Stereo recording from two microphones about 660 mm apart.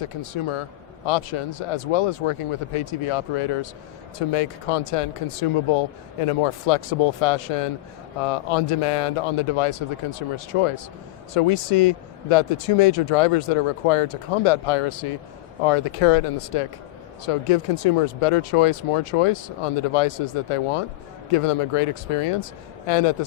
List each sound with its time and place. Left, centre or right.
0.0 s speech: left